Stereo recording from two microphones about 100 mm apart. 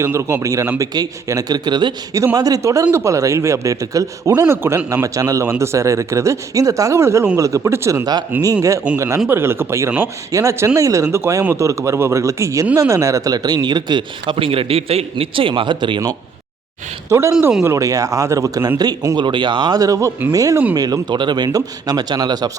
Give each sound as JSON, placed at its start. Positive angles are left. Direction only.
{"t": 0.0, "sound": "a man's voice", "side_deg": -25}
{"t": 2.1, "sound": "a man's voice", "side_deg": -35}
{"t": 9.0, "sound": "a man's voice", "side_deg": -30}
{"t": 14.3, "sound": "a man's voice", "side_deg": -65}
{"t": 15.2, "sound": "speech", "side_deg": -60}
{"t": 17.1, "sound": "a man's voice", "side_deg": -30}
{"t": 19.1, "sound": "speech", "side_deg": -50}